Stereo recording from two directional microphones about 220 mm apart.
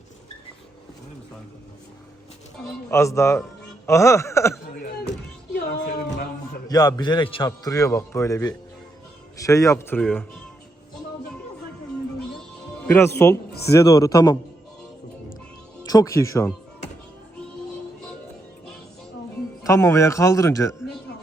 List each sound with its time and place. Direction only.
2.9 s a man's voice: 15° left (ahead or behind)
5.5 s music: 45° left (ahead or behind)
6.7 s a man's voice: 15° left (ahead or behind)
12.9 s a man's voice: 10° left (ahead or behind)
15.9 s a man's voice: 15° left (ahead or behind)
19.6 s a man's voice: 15° left (ahead or behind)